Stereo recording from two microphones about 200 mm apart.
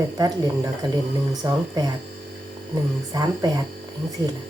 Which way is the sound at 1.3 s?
20° right (ahead or behind).